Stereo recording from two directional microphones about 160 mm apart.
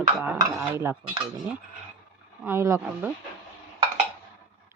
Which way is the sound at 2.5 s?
15° right (ahead or behind).